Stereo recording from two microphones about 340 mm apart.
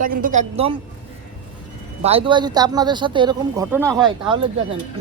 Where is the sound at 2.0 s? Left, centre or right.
Centre.